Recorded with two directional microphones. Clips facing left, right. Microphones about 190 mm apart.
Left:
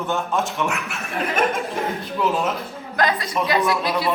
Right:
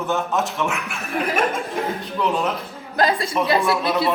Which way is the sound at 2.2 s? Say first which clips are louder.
Even; 5° left (ahead or behind).